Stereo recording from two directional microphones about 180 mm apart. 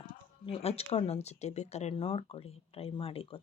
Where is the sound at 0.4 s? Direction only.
35° left (ahead or behind).